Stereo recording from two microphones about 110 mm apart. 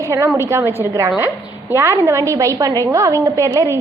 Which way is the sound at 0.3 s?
20° right (ahead or behind).